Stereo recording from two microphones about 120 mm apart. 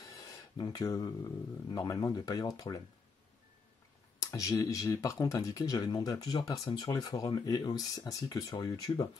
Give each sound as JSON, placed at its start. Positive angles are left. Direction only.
{"t": 0.6, "sound": "speech", "side_deg": 30}
{"t": 4.2, "sound": "speech", "side_deg": 30}